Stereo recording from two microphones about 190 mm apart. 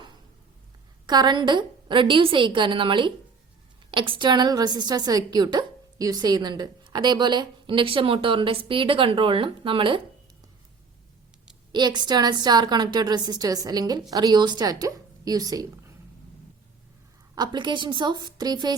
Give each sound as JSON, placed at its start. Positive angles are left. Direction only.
{"t": 1.0, "sound": "a woman's voice", "side_deg": -20}
{"t": 11.7, "sound": "a woman's voice", "side_deg": -20}
{"t": 17.3, "sound": "a woman's voice", "side_deg": -20}